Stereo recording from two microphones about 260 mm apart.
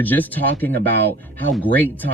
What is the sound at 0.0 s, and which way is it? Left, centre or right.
Speech, centre.